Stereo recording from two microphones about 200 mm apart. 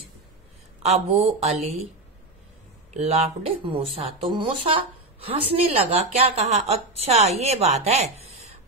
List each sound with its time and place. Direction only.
0.8 s a woman's voice: 30° right (ahead or behind)
2.9 s a woman's voice: 35° right (ahead or behind)